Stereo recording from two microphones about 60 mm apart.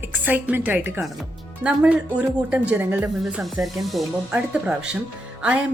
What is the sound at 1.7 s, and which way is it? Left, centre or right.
A woman's voice, centre.